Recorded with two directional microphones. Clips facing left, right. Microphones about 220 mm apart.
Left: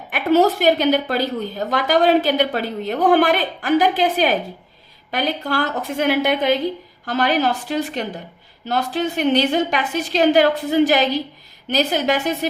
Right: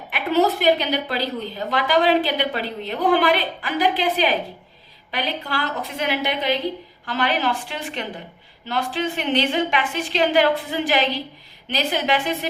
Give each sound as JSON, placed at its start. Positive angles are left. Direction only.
{"t": 0.1, "sound": "a woman's voice", "side_deg": 45}